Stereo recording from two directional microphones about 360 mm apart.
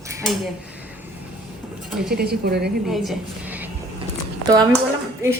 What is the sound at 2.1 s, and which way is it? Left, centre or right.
Speech, right.